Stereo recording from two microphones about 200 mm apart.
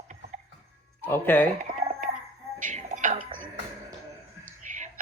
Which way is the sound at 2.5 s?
40° right (ahead or behind).